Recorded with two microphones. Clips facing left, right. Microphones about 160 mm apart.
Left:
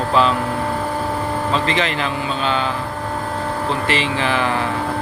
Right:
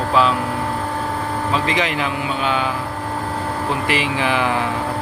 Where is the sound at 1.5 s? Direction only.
10° right (ahead or behind).